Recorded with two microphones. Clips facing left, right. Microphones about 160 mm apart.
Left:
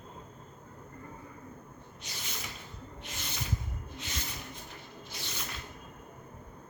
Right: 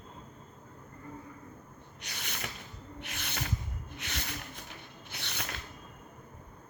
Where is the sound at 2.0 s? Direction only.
65° right (ahead or behind).